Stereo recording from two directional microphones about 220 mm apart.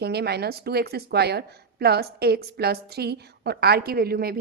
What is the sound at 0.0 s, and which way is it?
Speech, 50° right (ahead or behind).